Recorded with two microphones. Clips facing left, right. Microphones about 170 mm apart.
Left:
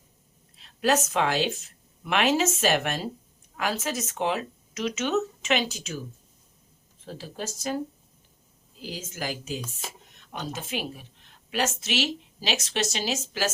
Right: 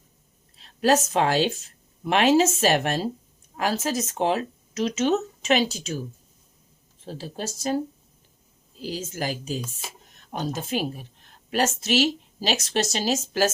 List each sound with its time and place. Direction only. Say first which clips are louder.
0.5 s speech: right 3 dB; 35° right (ahead or behind)
7.0 s speech: right 3 dB; 35° right (ahead or behind)
8.8 s a woman's voice: right 5 dB; 35° right (ahead or behind)